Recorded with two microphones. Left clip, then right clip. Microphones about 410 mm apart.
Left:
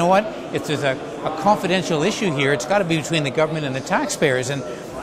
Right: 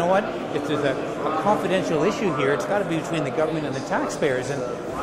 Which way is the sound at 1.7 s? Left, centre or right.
Left.